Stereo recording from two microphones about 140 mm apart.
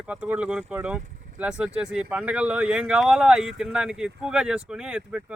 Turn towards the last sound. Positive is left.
turn(degrees=-5)  # may be behind; listen again after turning